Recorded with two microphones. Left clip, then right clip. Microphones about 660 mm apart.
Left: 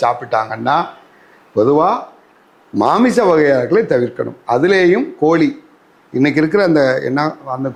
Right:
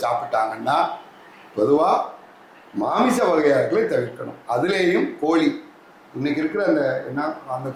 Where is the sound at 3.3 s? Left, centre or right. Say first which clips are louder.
Left 6 dB; left.